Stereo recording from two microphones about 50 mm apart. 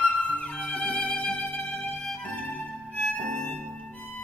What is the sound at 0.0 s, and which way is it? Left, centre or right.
Music, left.